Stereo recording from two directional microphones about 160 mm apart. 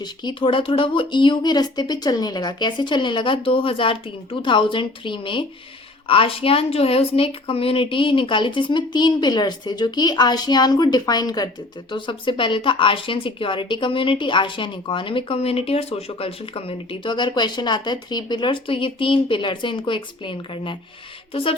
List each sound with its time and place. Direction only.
0.0 s speech: 30° left (ahead or behind)